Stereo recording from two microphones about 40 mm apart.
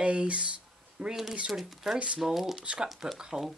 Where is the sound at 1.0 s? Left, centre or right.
Centre.